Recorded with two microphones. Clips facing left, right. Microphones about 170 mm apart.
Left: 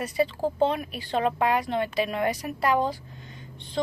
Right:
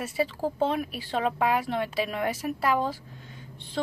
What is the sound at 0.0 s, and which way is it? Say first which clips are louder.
A woman's voice: left 3 dB; 5° right (ahead or behind).